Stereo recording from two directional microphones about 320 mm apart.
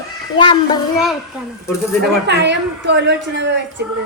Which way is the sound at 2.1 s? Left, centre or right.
Right.